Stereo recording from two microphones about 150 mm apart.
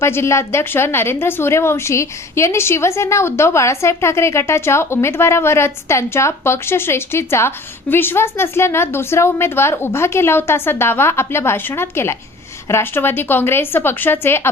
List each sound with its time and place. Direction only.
0.0 s a woman's voice: 15° left (ahead or behind)